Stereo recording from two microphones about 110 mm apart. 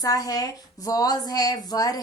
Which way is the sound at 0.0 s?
35° left (ahead or behind).